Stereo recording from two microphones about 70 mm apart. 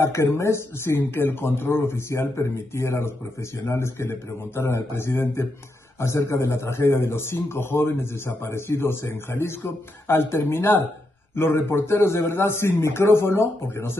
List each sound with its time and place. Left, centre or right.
0.0 s a man's voice: left